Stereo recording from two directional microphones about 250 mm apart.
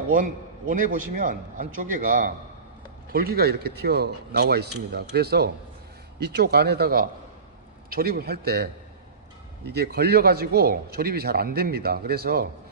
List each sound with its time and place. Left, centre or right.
0.1 s speech: right
9.7 s speech: right